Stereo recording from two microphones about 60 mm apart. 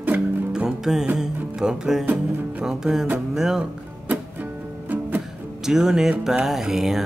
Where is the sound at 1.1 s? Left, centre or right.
Centre.